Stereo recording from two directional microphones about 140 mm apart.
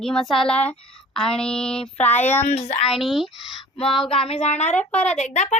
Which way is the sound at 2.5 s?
55° left (ahead or behind).